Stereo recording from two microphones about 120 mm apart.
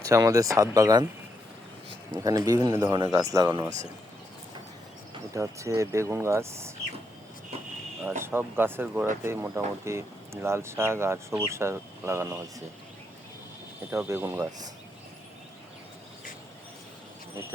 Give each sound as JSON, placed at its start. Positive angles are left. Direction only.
{"t": 0.0, "sound": "speech", "side_deg": -25}
{"t": 2.1, "sound": "a man's voice", "side_deg": -30}
{"t": 5.3, "sound": "speech", "side_deg": -25}
{"t": 8.2, "sound": "speech", "side_deg": -20}
{"t": 13.9, "sound": "speech", "side_deg": -20}